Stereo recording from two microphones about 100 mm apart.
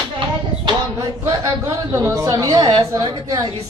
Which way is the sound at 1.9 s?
35° right (ahead or behind).